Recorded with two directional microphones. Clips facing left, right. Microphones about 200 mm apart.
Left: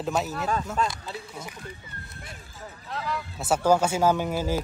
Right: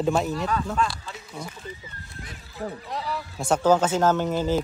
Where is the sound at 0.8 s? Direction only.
40° left (ahead or behind).